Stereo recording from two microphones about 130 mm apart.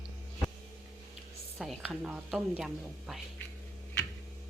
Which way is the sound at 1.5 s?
Centre (ahead or behind).